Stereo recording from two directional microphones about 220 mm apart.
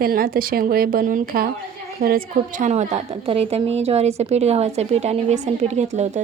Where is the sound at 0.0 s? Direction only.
40° right (ahead or behind).